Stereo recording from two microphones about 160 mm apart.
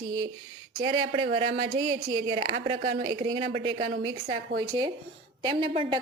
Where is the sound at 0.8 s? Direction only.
30° right (ahead or behind).